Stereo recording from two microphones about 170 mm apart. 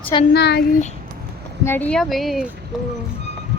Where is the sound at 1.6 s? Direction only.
10° left (ahead or behind).